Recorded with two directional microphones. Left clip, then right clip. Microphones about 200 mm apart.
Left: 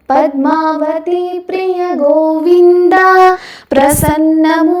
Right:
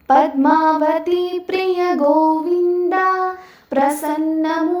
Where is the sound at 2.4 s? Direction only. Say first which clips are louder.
Left 10 dB; 45° left (ahead or behind).